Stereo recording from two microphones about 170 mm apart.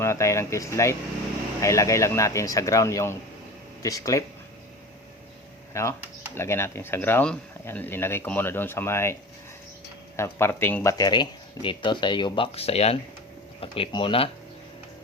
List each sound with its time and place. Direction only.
0.0 s speech: 15° left (ahead or behind)
5.7 s speech: 15° left (ahead or behind)
10.2 s speech: 15° left (ahead or behind)
10.9 s speech: 25° left (ahead or behind)